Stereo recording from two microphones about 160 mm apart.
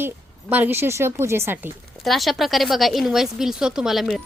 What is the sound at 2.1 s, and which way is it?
Speech, centre (ahead or behind).